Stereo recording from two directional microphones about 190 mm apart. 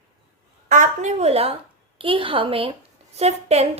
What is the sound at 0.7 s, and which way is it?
A woman's voice, 40° right (ahead or behind).